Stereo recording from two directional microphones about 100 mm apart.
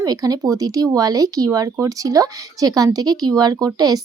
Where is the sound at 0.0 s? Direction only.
40° right (ahead or behind).